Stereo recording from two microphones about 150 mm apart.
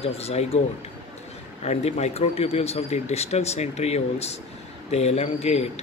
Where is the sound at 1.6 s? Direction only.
45° left (ahead or behind).